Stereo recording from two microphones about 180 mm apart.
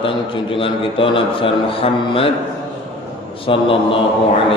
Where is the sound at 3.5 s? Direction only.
30° left (ahead or behind).